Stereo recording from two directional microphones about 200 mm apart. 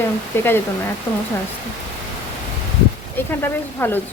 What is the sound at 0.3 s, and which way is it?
Speech, 10° left (ahead or behind).